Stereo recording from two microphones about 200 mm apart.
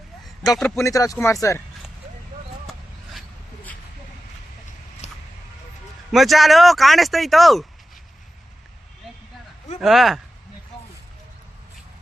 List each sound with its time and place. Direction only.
0.8 s speech: 15° left (ahead or behind)
3.2 s zipper: 10° left (ahead or behind)
5.0 s a sound: 30° left (ahead or behind)
6.1 s speech: centre (ahead or behind)
9.8 s speech: centre (ahead or behind)